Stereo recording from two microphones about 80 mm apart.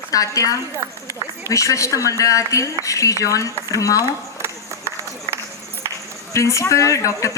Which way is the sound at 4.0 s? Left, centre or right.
Right.